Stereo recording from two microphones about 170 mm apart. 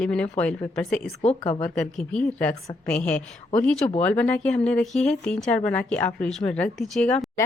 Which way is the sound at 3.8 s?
40° left (ahead or behind).